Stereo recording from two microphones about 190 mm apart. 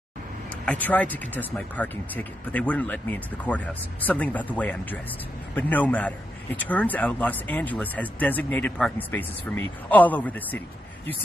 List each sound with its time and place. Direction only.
0.7 s a man's voice: 10° left (ahead or behind)